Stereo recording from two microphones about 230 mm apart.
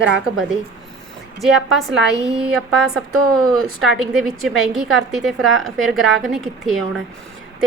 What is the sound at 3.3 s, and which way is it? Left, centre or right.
A woman's voice, centre.